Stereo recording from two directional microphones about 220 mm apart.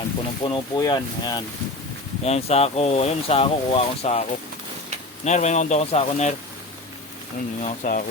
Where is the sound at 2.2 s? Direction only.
30° left (ahead or behind).